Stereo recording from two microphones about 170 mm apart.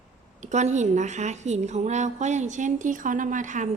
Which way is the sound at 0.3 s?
45° right (ahead or behind).